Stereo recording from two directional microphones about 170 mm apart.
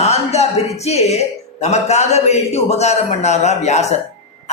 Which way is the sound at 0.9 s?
40° left (ahead or behind).